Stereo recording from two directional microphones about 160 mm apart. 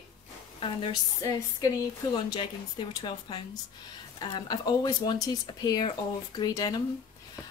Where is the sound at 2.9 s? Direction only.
25° left (ahead or behind).